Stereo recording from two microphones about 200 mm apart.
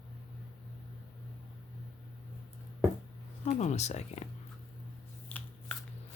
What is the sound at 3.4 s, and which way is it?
Speech, 35° left (ahead or behind).